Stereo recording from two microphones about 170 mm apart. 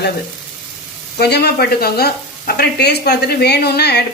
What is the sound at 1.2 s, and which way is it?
Speech, 70° left (ahead or behind).